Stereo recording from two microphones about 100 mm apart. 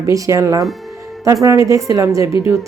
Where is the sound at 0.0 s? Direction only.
30° right (ahead or behind).